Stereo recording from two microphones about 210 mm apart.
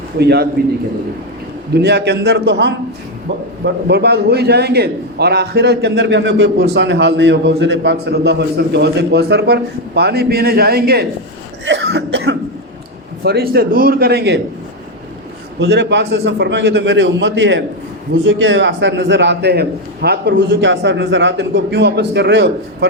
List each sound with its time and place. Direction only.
0.2 s a man's voice: 50° right (ahead or behind)
1.7 s a man's voice: 55° right (ahead or behind)
11.6 s cough: 60° right (ahead or behind)
13.2 s a man's voice: 50° right (ahead or behind)
15.5 s a man's voice: 55° right (ahead or behind)